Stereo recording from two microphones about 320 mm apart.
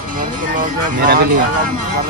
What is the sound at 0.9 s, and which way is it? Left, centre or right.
Speech, right.